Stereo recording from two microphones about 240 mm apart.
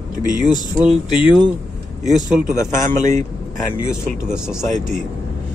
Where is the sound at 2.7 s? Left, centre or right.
Right.